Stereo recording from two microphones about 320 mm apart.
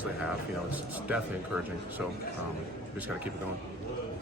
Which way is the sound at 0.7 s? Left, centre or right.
Centre.